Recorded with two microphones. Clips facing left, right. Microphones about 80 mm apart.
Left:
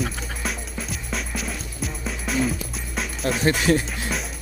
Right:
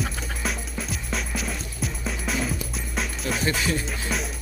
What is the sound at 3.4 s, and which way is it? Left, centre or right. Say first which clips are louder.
Speech: left 7 dB; left.